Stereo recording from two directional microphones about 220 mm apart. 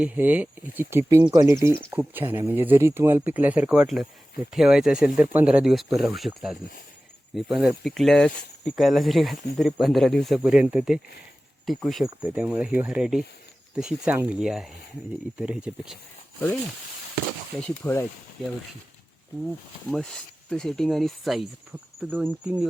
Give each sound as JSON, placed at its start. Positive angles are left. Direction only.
{"t": 0.0, "sound": "speech", "side_deg": -5}
{"t": 17.6, "sound": "speech", "side_deg": 10}
{"t": 19.9, "sound": "speech", "side_deg": 0}